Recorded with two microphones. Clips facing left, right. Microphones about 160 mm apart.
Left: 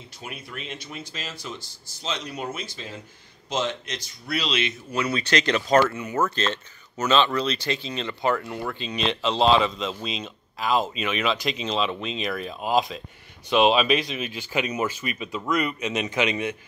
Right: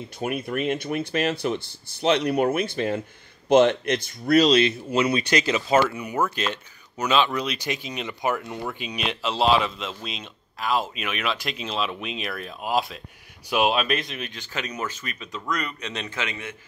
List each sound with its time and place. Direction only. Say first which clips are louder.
0.2 s speech: right 12 dB; 55° right (ahead or behind); by 4.7 s 40° right (ahead or behind)
4.9 s speech: right 1 dB; 20° right (ahead or behind); by 16.5 s 20° left (ahead or behind)